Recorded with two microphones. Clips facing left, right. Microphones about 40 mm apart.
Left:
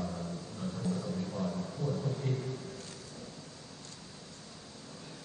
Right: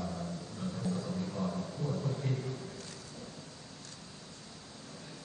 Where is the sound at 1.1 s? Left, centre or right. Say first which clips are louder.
Even; centre.